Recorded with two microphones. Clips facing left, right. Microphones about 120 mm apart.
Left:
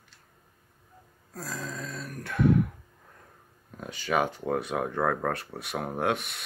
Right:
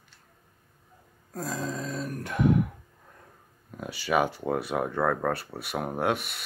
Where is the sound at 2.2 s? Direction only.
15° right (ahead or behind).